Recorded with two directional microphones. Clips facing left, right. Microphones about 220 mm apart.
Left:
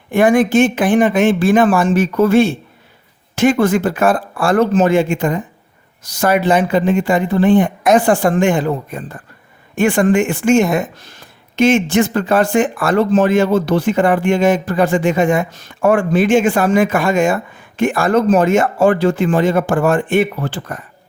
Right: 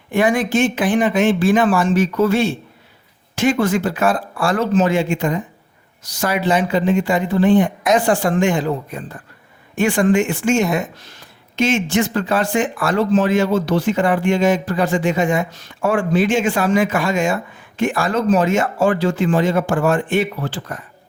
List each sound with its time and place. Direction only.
0.1 s speech: 50° left (ahead or behind)